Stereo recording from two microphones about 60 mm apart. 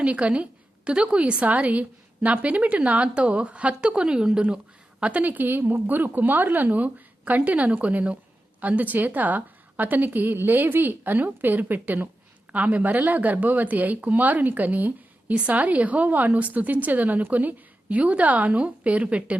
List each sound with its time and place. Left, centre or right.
0.0 s a woman's voice: centre